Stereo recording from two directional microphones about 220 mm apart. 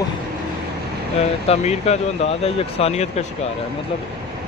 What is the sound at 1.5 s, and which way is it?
Speech, 30° left (ahead or behind).